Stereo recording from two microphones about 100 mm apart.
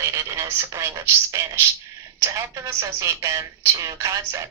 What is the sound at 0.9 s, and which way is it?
A woman's voice, 35° right (ahead or behind).